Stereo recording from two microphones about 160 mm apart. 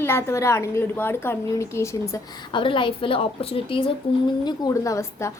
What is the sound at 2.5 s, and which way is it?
A woman's voice, 30° left (ahead or behind).